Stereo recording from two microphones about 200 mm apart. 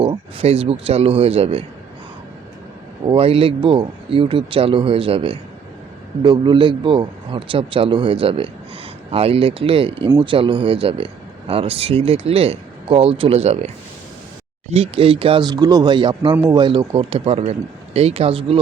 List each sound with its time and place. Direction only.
0.0 s speech: 25° right (ahead or behind)
3.1 s speech: 30° right (ahead or behind)
14.7 s speech: 30° right (ahead or behind)